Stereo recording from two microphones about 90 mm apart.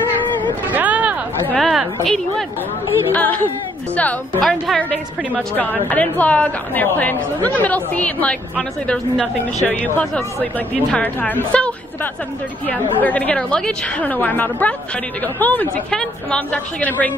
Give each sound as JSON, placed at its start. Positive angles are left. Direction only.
{"t": 0.7, "sound": "a sound", "side_deg": -15}
{"t": 1.6, "sound": "a woman's voice", "side_deg": 0}
{"t": 3.1, "sound": "a woman's voice", "side_deg": 20}
{"t": 4.4, "sound": "a woman's voice", "side_deg": 5}
{"t": 15.9, "sound": "a woman's voice", "side_deg": 10}